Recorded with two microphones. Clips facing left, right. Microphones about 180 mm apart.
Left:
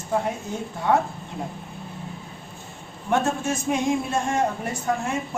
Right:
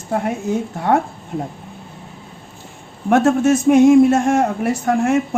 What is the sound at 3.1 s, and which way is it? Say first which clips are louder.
A man's voice: right 10 dB; 80° right.